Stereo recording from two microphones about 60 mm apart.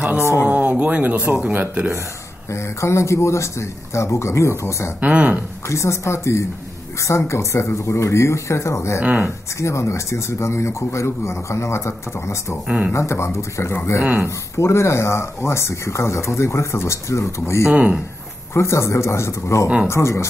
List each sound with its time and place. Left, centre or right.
0.2 s speech: left
0.5 s speech: right
2.5 s speech: left
5.0 s speech: right
5.7 s speech: left
9.0 s speech: centre
9.6 s speech: left
12.6 s speech: centre
12.9 s speech: left
17.6 s speech: right
18.5 s speech: left